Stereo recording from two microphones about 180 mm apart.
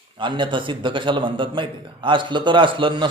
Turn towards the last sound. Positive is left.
turn(degrees=-25)  # may be behind; listen again after turning